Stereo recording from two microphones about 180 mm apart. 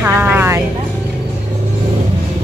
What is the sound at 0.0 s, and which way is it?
Music, 10° right (ahead or behind).